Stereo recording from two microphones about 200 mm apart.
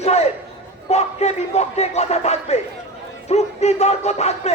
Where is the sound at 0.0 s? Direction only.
30° left (ahead or behind).